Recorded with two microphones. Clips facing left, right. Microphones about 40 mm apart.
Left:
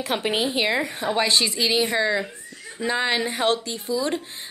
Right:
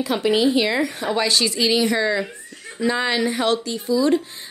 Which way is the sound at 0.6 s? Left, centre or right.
Centre.